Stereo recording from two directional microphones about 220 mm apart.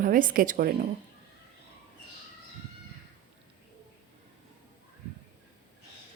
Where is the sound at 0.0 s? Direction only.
40° right (ahead or behind).